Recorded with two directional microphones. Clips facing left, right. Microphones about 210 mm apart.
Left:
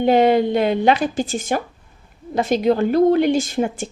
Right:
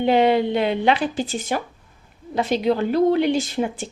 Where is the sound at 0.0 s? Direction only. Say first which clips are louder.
Left 3 dB; 45° left (ahead or behind).